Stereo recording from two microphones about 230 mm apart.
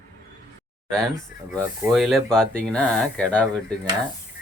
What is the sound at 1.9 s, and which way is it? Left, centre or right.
Speech, centre.